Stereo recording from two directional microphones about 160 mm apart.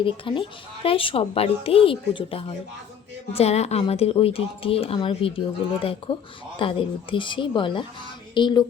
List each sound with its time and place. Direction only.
0.0 s a woman's voice: 35° left (ahead or behind)